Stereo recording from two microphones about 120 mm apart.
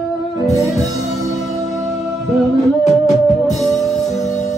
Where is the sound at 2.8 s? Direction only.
75° left (ahead or behind).